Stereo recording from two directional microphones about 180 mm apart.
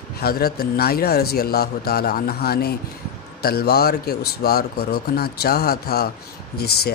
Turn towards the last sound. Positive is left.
turn(degrees=65)  # may be behind; listen again after turning